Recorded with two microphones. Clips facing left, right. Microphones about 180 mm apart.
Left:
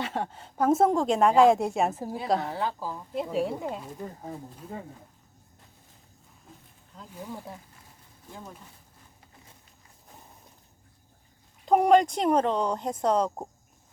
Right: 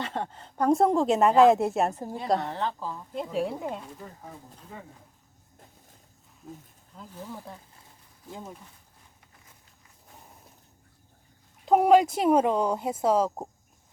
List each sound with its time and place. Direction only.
0.0 s a woman's voice: 10° left (ahead or behind)
4.0 s speech: 30° left (ahead or behind)
6.4 s a woman's voice: centre (ahead or behind)
7.1 s speech: 10° left (ahead or behind)
8.3 s speech: 20° right (ahead or behind)
11.6 s a woman's voice: 5° right (ahead or behind)